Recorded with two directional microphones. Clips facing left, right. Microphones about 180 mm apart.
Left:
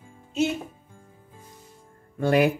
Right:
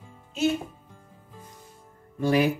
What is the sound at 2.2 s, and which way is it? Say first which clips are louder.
Speech: left 2 dB; 55° left (ahead or behind).